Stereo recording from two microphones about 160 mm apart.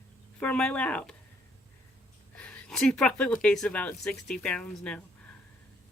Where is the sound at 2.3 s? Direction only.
5° left (ahead or behind).